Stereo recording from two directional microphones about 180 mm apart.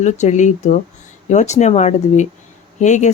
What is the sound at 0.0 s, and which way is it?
Speech, 40° left (ahead or behind).